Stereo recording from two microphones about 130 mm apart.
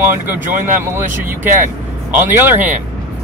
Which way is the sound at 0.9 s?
15° right (ahead or behind).